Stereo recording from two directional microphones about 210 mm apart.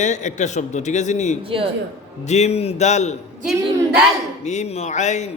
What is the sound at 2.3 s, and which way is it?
Speech, 30° left (ahead or behind).